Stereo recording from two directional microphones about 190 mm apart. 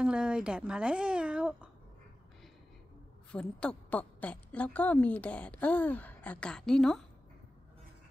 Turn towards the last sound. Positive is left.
turn(degrees=0)  # may be behind; listen again after turning